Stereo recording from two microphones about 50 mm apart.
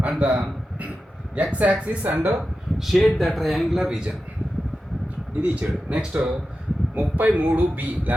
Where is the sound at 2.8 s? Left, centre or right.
Centre.